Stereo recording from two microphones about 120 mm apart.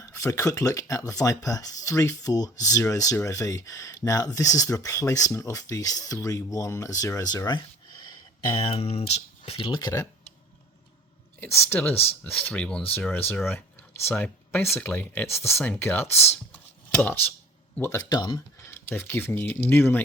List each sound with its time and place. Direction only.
0.0 s speech: 25° left (ahead or behind); by 9.6 s 60° left (ahead or behind)
9.6 s speech: 40° left (ahead or behind)
11.3 s speech: 15° left (ahead or behind)
18.1 s speech: 40° left (ahead or behind)
18.6 s speech: 20° left (ahead or behind)